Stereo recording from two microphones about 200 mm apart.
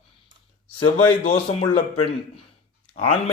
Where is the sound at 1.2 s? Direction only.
30° left (ahead or behind).